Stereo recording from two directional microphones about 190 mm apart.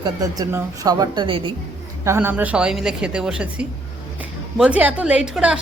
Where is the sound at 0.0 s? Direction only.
20° right (ahead or behind).